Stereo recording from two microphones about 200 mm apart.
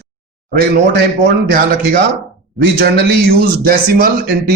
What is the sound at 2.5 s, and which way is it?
A man's voice, 55° right (ahead or behind).